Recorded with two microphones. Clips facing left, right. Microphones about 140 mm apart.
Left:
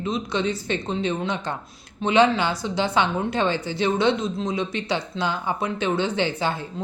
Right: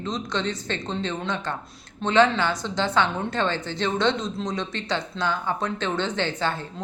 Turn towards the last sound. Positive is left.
turn(degrees=10)  # may be behind; listen again after turning